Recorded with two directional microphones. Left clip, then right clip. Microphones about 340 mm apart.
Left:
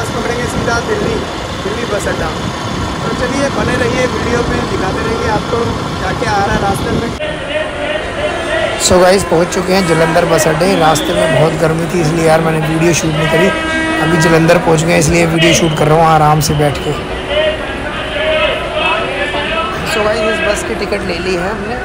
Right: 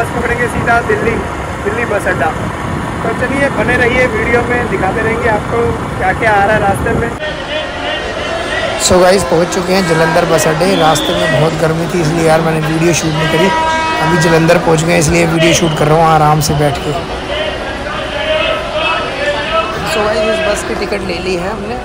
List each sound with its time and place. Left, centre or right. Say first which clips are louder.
8.8 s a man's voice: right 1 dB; centre
19.9 s a man's voice: even; centre